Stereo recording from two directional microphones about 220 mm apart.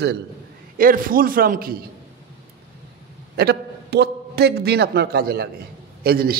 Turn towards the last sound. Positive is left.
turn(degrees=-45)  # may be behind; listen again after turning